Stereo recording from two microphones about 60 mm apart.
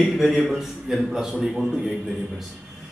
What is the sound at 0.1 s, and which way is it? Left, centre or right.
Speech, centre.